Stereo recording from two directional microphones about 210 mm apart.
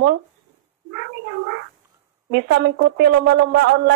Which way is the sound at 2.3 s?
55° right (ahead or behind).